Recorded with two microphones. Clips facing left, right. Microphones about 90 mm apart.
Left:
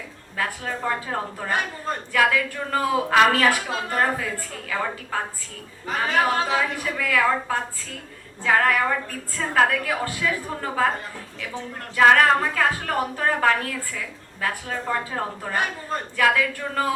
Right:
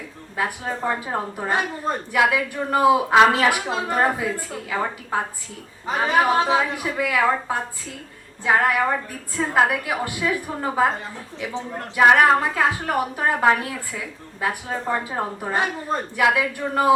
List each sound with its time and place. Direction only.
0.3 s a woman's voice: 20° right (ahead or behind)